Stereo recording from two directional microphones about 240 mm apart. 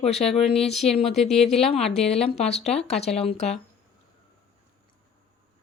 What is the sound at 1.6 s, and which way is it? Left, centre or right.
Speech, left.